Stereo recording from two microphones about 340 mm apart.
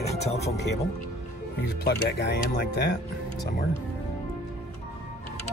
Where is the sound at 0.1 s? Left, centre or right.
Centre.